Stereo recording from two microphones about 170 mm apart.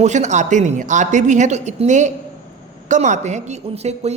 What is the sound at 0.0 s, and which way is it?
A woman's voice, 45° right (ahead or behind).